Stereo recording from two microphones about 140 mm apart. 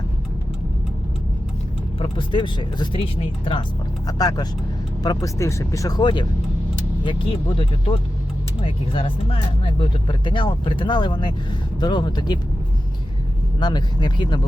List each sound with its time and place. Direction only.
2.0 s speech: 35° left (ahead or behind)
4.0 s speech: 30° left (ahead or behind)
13.6 s speech: 30° left (ahead or behind)